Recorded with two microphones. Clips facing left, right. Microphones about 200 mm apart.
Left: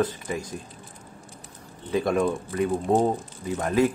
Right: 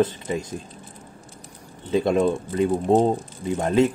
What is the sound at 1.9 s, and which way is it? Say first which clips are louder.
Speech: right 3 dB; 25° right (ahead or behind).